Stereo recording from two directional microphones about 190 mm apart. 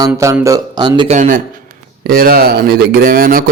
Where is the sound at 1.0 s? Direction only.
40° right (ahead or behind).